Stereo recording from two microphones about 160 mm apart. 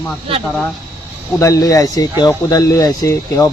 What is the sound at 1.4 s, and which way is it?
A man's voice, 20° left (ahead or behind).